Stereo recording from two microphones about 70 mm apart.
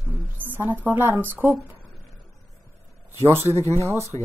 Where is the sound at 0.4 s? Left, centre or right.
Right.